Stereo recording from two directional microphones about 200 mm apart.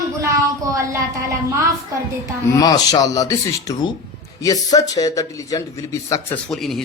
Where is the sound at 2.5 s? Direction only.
20° left (ahead or behind).